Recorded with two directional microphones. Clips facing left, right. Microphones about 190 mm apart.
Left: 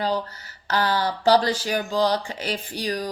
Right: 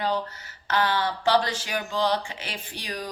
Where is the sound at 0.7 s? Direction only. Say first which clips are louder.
Left 2 dB; 35° left (ahead or behind).